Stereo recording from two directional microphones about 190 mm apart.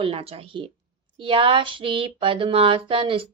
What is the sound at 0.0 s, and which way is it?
Speech, 30° right (ahead or behind).